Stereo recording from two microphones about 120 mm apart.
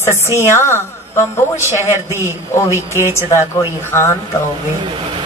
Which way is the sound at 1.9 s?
20° right (ahead or behind).